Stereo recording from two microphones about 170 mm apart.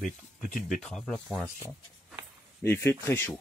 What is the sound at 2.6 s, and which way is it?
Speech, 15° left (ahead or behind).